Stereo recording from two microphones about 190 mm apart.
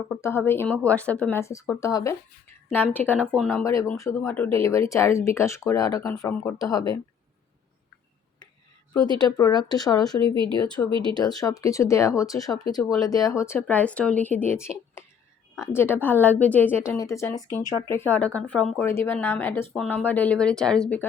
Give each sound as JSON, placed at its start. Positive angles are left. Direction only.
{"t": 0.2, "sound": "speech", "side_deg": 10}
{"t": 3.6, "sound": "speech", "side_deg": 15}
{"t": 9.1, "sound": "speech", "side_deg": 20}
{"t": 10.2, "sound": "speech", "side_deg": -25}
{"t": 11.0, "sound": "speech", "side_deg": 20}
{"t": 15.6, "sound": "speech", "side_deg": 10}